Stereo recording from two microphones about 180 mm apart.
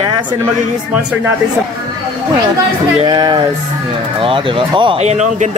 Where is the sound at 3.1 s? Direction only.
25° right (ahead or behind).